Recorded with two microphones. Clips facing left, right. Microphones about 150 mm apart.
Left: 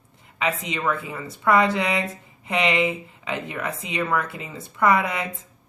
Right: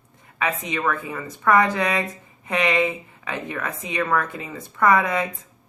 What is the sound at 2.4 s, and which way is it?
Speech, 20° left (ahead or behind).